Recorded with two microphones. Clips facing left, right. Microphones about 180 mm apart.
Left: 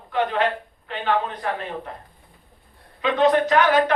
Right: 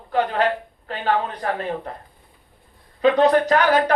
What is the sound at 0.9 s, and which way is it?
Speech, 40° right (ahead or behind).